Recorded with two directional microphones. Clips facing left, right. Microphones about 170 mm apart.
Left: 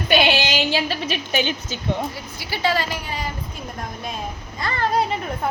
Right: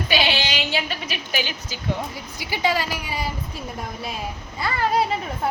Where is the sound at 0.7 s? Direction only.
30° left (ahead or behind).